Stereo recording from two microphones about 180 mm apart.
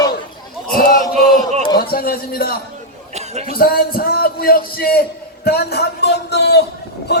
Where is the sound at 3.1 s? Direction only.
35° right (ahead or behind).